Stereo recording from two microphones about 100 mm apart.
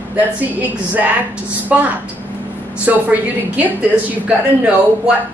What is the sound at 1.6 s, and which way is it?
Speech, 15° right (ahead or behind).